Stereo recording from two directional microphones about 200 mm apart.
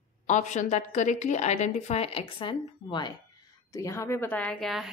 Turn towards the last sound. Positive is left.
turn(degrees=0)  # may be behind; listen again after turning